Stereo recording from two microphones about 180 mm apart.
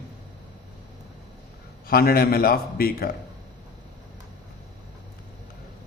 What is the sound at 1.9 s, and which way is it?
A man's voice, 55° left (ahead or behind).